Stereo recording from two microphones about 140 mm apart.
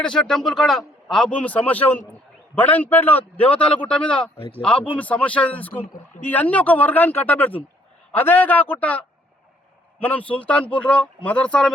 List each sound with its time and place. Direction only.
0.0 s a man's voice: 5° left (ahead or behind)
4.4 s speech: 40° left (ahead or behind)
4.6 s speech: 10° left (ahead or behind)